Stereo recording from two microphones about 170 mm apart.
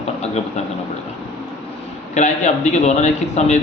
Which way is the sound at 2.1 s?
45° left (ahead or behind).